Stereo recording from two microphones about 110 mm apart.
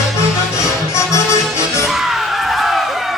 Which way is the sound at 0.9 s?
25° left (ahead or behind).